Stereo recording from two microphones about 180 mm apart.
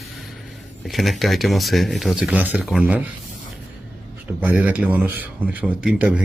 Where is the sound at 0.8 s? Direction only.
Centre (ahead or behind).